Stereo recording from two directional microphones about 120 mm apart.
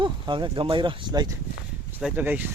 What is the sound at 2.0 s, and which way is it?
Speech, 15° right (ahead or behind).